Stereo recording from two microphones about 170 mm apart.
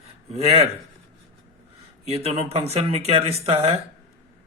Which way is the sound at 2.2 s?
35° right (ahead or behind).